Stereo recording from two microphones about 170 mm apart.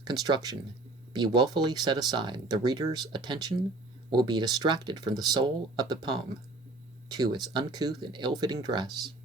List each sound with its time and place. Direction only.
0.1 s speech: 25° right (ahead or behind)